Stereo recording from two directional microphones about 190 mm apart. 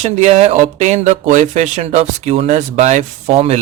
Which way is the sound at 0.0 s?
35° right (ahead or behind).